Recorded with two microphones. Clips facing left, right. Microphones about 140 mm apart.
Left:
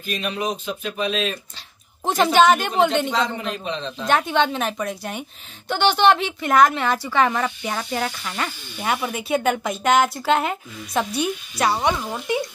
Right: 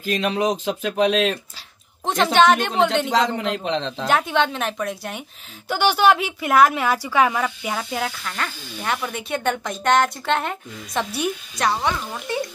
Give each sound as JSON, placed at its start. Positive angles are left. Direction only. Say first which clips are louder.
{"t": 0.0, "sound": "speech", "louder": "right 5 dB", "side_deg": -90}
{"t": 2.3, "sound": "a woman's voice", "louder": "even", "side_deg": 5}
{"t": 3.1, "sound": "speech", "louder": "right 3 dB", "side_deg": -80}
{"t": 4.1, "sound": "a woman's voice", "louder": "left 1 dB", "side_deg": 0}
{"t": 8.2, "sound": "speech", "louder": "left 1 dB", "side_deg": 10}